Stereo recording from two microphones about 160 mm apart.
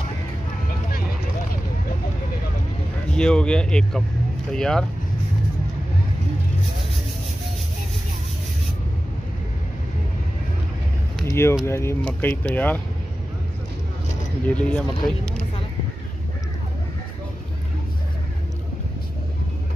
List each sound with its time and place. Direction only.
3.1 s speech: 5° left (ahead or behind)
11.2 s a sound: 15° left (ahead or behind)
11.6 s speech: 15° left (ahead or behind)
14.5 s speech: 10° left (ahead or behind)